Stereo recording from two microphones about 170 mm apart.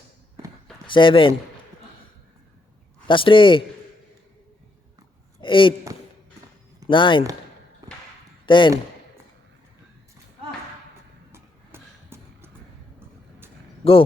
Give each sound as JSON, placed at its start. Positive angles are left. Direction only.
{"t": 0.9, "sound": "speech", "side_deg": 30}
{"t": 3.1, "sound": "a man's voice", "side_deg": 30}
{"t": 5.4, "sound": "speech", "side_deg": 30}
{"t": 6.8, "sound": "speech", "side_deg": 30}
{"t": 7.8, "sound": "a sound", "side_deg": -20}
{"t": 8.4, "sound": "speech", "side_deg": 30}
{"t": 11.3, "sound": "a sound", "side_deg": -15}
{"t": 13.8, "sound": "a man's voice", "side_deg": 35}